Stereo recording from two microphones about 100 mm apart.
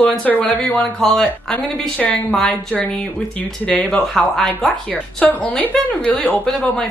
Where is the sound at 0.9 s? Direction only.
5° left (ahead or behind).